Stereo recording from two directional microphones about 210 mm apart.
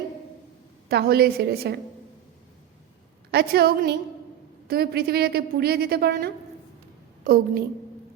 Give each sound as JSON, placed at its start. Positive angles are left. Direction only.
{"t": 0.9, "sound": "a woman's voice", "side_deg": -50}
{"t": 3.3, "sound": "a woman's voice", "side_deg": -50}